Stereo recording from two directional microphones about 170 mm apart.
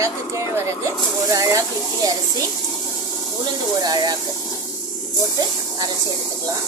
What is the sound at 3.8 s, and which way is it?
Speech, 25° right (ahead or behind).